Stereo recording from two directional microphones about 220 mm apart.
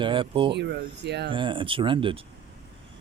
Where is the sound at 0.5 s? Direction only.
50° right (ahead or behind).